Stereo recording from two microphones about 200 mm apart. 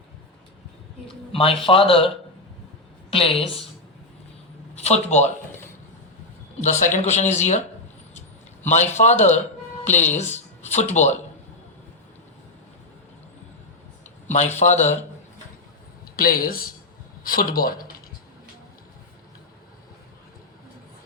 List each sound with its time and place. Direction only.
1.0 s speech: 25° left (ahead or behind)
3.1 s speech: 30° left (ahead or behind)
4.7 s speech: 35° left (ahead or behind)
6.6 s speech: 35° left (ahead or behind)
8.7 s speech: 35° left (ahead or behind)
14.3 s speech: 35° left (ahead or behind)
16.1 s speech: 45° left (ahead or behind)